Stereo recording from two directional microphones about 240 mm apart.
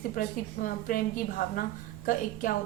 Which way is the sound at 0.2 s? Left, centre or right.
Left.